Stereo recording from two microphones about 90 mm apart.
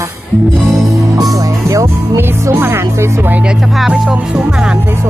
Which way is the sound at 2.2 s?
25° right (ahead or behind).